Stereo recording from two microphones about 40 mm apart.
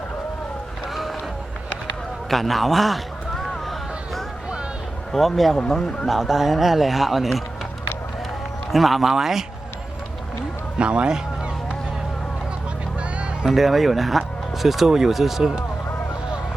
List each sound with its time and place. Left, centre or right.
2.3 s speech: centre
3.3 s a sound: centre
5.1 s speech: centre
8.7 s speech: centre
10.8 s speech: right
13.4 s speech: centre